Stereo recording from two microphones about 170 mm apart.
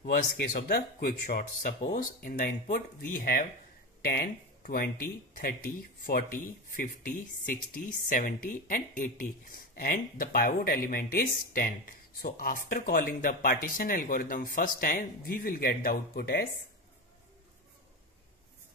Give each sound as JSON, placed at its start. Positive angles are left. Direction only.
{"t": 0.0, "sound": "speech", "side_deg": 60}
{"t": 1.2, "sound": "speech", "side_deg": 50}